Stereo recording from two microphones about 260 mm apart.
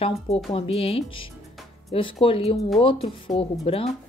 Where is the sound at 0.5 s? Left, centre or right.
Left.